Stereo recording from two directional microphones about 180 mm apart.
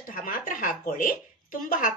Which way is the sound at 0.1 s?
50° left (ahead or behind).